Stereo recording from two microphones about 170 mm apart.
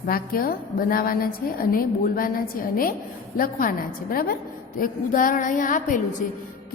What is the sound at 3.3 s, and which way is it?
A woman's voice, 55° left (ahead or behind).